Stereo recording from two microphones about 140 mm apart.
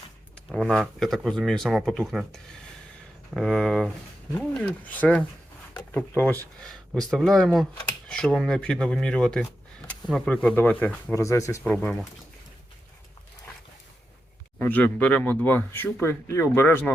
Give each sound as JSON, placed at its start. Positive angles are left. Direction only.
{"t": 0.5, "sound": "speech", "side_deg": 0}
{"t": 6.6, "sound": "speech", "side_deg": 5}
{"t": 11.1, "sound": "speech", "side_deg": 20}
{"t": 14.6, "sound": "speech", "side_deg": 10}